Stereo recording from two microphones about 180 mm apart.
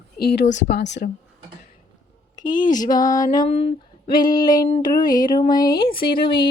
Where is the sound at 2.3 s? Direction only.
45° left (ahead or behind).